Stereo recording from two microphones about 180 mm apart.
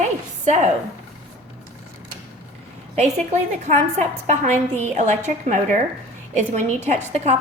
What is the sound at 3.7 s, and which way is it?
A woman's voice, 40° right (ahead or behind).